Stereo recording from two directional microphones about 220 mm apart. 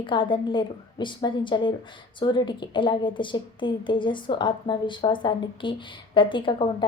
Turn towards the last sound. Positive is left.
turn(degrees=20)  # may be behind; listen again after turning